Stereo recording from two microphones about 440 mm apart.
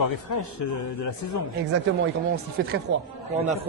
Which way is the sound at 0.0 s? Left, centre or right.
Left.